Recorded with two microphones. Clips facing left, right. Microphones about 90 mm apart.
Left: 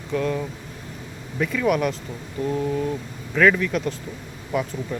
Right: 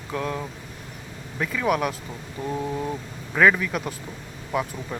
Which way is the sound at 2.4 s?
10° right (ahead or behind).